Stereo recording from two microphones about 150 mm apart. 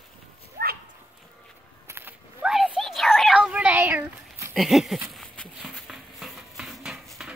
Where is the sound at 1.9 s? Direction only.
15° right (ahead or behind).